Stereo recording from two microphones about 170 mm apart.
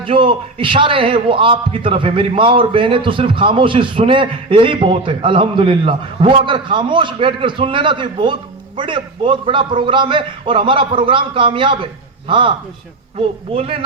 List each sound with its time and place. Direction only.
0.0 s a man's voice: 30° right (ahead or behind)